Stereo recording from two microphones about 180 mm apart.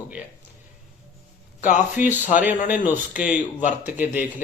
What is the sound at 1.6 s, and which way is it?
Speech, 45° left (ahead or behind).